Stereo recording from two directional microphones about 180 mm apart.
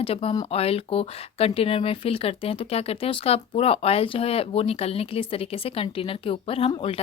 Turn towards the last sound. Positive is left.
turn(degrees=30)  # may be behind; listen again after turning